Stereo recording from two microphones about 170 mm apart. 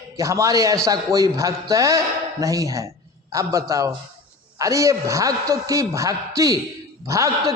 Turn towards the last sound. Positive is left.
turn(degrees=-20)  # may be behind; listen again after turning